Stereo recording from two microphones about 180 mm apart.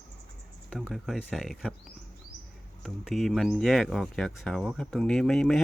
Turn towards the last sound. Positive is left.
turn(degrees=5)  # may be behind; listen again after turning